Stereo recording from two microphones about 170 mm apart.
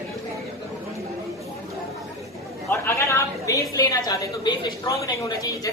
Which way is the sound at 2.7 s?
15° left (ahead or behind).